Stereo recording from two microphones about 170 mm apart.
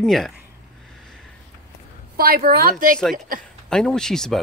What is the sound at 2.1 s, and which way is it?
A woman's voice, 60° right (ahead or behind).